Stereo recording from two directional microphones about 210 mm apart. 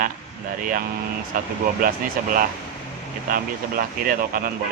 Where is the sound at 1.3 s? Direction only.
40° right (ahead or behind).